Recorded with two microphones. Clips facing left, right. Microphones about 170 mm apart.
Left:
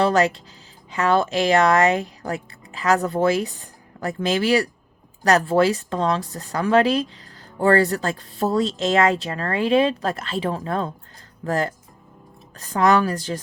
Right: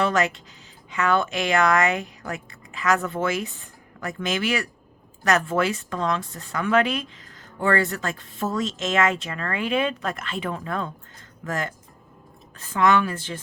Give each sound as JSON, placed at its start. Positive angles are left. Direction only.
{"t": 0.0, "sound": "speech", "side_deg": 35}